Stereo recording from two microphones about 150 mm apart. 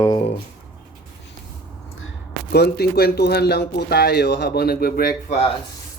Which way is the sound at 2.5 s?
90° left.